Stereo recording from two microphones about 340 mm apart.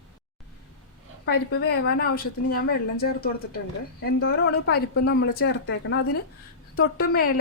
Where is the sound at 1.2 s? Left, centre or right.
Left.